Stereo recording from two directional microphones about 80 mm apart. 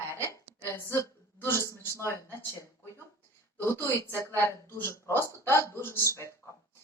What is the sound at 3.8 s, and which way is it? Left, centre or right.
A woman's voice, left.